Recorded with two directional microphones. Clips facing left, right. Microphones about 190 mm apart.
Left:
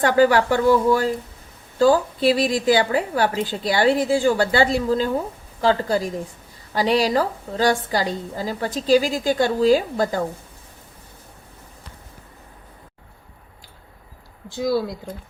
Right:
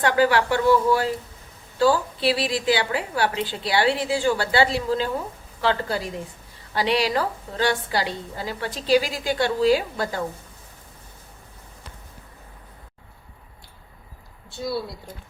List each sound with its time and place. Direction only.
0.0 s a woman's voice: 45° left (ahead or behind)
1.8 s a woman's voice: 45° left (ahead or behind)
14.5 s speech: 90° left